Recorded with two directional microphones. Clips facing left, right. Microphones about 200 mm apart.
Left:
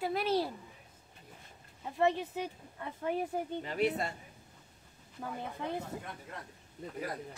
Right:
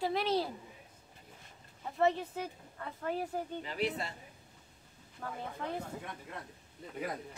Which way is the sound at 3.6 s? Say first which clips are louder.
Left 6 dB; 45° left (ahead or behind).